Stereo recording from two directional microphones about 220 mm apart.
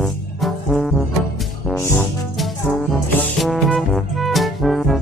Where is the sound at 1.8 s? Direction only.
10° left (ahead or behind).